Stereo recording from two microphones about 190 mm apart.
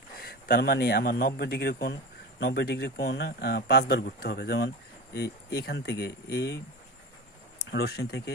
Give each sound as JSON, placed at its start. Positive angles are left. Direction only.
{"t": 0.2, "sound": "speech", "side_deg": 55}
{"t": 7.6, "sound": "speech", "side_deg": 55}